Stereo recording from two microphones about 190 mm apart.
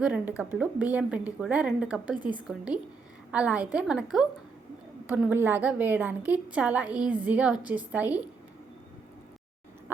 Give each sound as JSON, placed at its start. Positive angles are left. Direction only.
{"t": 0.0, "sound": "a woman's voice", "side_deg": -10}